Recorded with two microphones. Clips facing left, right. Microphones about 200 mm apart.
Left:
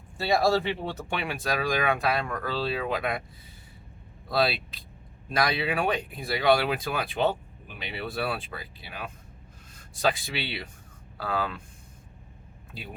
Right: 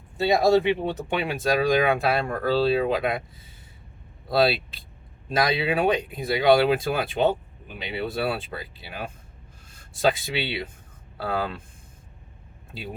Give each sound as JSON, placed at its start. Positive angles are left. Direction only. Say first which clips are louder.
{"t": 0.2, "sound": "speech", "louder": "right 5 dB", "side_deg": -20}
{"t": 4.3, "sound": "speech", "louder": "right 5 dB", "side_deg": -30}